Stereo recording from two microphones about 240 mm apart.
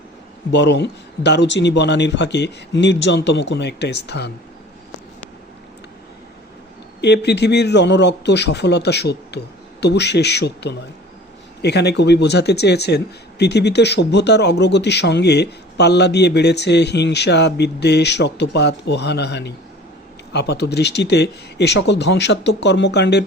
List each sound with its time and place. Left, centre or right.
0.5 s speech: left
7.0 s speech: left